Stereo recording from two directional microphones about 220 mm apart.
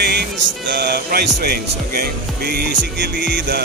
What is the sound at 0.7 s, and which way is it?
Speech, 50° right (ahead or behind).